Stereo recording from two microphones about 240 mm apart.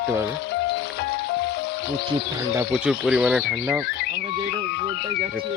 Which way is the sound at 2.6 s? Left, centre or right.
Centre.